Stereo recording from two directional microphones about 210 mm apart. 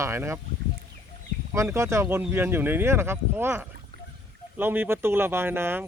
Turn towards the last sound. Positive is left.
turn(degrees=-10)  # may be behind; listen again after turning